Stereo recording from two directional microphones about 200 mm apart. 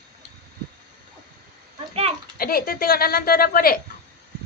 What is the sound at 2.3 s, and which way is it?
Speech, 45° left (ahead or behind).